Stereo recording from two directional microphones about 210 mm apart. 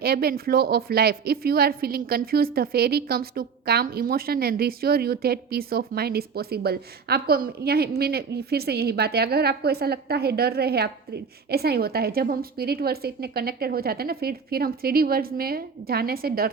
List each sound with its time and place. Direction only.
0.0 s speech: 45° right (ahead or behind)